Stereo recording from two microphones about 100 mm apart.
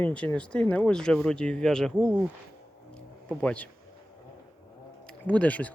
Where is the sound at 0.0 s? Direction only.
10° left (ahead or behind).